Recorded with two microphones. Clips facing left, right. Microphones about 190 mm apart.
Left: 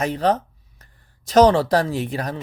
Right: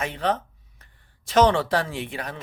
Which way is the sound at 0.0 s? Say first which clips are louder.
Left 5 dB; 40° left (ahead or behind).